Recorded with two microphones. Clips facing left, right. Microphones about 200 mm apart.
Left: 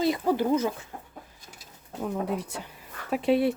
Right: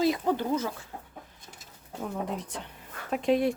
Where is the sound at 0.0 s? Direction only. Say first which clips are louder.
Left 1 dB; 5° left (ahead or behind).